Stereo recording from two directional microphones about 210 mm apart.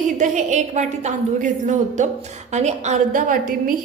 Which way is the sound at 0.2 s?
35° right (ahead or behind).